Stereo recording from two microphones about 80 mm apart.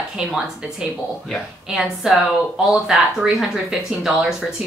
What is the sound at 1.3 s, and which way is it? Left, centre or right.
Speech, centre.